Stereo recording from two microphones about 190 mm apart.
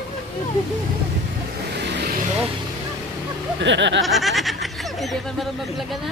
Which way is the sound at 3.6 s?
70° right (ahead or behind).